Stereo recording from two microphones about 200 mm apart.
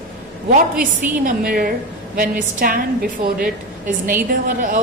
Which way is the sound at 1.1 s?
45° right (ahead or behind).